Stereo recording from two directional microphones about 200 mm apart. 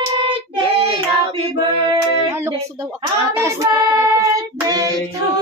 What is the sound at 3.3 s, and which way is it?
Child singing, 15° right (ahead or behind).